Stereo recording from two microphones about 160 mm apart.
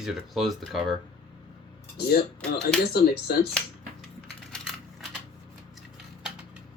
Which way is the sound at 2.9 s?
75° left (ahead or behind).